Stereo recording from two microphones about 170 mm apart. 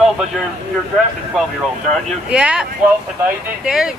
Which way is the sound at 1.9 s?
Centre (ahead or behind).